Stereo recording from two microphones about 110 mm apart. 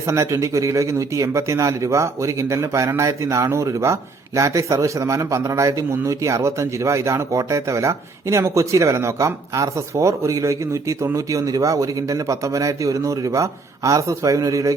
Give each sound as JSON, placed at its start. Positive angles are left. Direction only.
{"t": 0.0, "sound": "a man's voice", "side_deg": -30}